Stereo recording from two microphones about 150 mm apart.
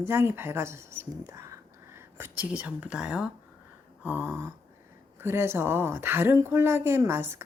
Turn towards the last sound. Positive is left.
turn(degrees=-15)  # may be behind; listen again after turning